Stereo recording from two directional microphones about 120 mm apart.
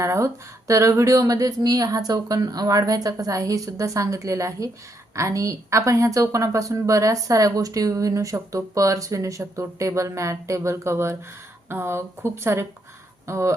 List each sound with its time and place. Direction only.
0.0 s speech: 25° right (ahead or behind)